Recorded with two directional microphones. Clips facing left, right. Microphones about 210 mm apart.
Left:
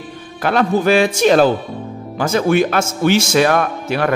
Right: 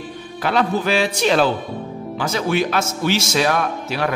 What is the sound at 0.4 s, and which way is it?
A man's voice, 50° left (ahead or behind).